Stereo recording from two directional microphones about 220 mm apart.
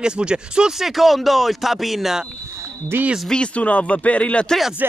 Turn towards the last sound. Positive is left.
turn(degrees=0)  # may be behind; listen again after turning